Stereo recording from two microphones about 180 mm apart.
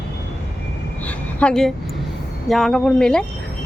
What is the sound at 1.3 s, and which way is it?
A woman's voice, 5° left (ahead or behind).